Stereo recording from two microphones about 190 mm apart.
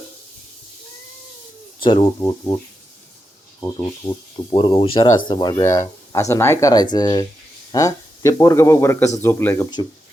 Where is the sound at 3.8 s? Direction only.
20° left (ahead or behind).